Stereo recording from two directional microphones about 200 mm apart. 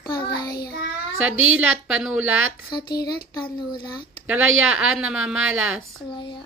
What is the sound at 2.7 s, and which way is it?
Speech, 20° left (ahead or behind).